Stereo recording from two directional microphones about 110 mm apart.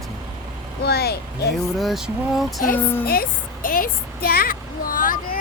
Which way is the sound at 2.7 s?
20° left (ahead or behind).